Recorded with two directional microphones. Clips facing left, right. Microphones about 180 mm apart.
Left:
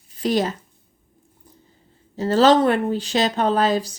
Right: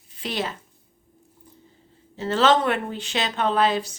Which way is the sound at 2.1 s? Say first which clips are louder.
Left 5 dB; 40° left (ahead or behind).